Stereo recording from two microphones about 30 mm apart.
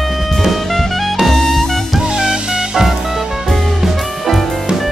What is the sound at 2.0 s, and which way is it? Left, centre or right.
Music, right.